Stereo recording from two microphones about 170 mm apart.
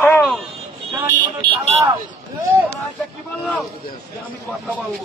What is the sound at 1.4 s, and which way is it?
Speech, 40° right (ahead or behind).